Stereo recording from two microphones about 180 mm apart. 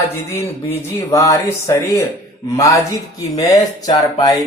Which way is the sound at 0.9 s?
15° left (ahead or behind).